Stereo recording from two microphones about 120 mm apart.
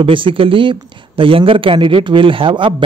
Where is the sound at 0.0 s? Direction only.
45° right (ahead or behind).